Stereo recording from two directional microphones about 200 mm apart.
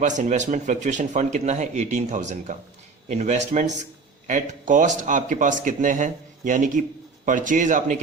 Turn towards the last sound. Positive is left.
turn(degrees=-40)  # may be behind; listen again after turning